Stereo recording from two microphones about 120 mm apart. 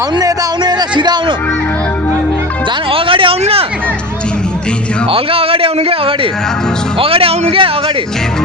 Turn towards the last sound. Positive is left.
turn(degrees=-50)  # may be behind; listen again after turning